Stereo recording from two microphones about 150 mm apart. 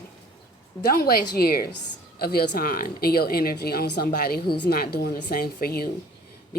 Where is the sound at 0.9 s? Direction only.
80° left.